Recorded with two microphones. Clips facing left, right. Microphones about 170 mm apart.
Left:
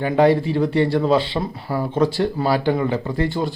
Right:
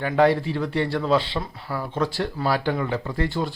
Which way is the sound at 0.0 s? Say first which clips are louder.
Left 3 dB; 10° left (ahead or behind).